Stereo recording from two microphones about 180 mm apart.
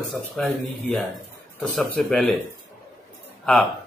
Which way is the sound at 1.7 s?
5° left (ahead or behind).